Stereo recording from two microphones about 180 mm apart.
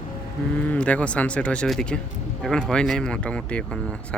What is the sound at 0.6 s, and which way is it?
Speech, 5° left (ahead or behind).